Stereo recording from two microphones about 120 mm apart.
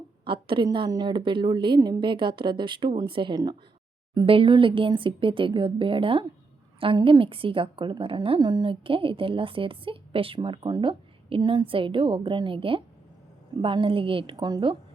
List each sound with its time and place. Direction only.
0.3 s a woman's voice: 45° right (ahead or behind)
8.4 s a woman's voice: 35° right (ahead or behind)